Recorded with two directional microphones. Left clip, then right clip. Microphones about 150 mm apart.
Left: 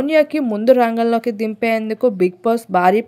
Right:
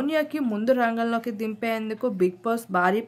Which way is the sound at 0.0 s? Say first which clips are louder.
Left 10 dB; 45° left (ahead or behind).